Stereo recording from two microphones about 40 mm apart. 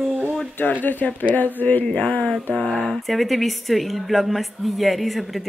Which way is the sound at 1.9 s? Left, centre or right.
Left.